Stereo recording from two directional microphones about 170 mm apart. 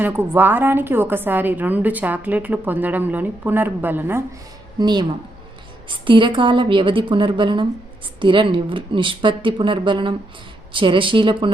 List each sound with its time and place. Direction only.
0.0 s a woman's voice: 10° right (ahead or behind)
4.8 s speech: 25° right (ahead or behind)
6.1 s speech: 30° right (ahead or behind)